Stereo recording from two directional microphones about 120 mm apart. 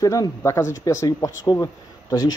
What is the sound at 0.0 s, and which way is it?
Speech, 30° left (ahead or behind).